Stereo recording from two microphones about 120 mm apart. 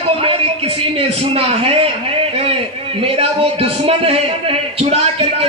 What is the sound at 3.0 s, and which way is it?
A man's voice, 55° right (ahead or behind).